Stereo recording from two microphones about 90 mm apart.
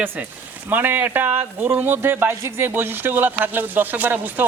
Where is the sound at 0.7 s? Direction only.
20° right (ahead or behind).